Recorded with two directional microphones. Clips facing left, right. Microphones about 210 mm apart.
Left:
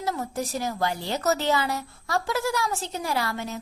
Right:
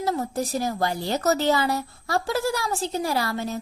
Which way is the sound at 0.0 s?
35° right (ahead or behind).